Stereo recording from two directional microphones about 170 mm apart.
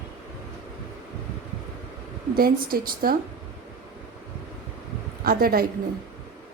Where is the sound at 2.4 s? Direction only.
60° right (ahead or behind).